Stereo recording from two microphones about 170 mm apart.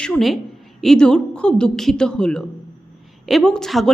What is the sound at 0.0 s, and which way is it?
A woman's voice, 5° left (ahead or behind).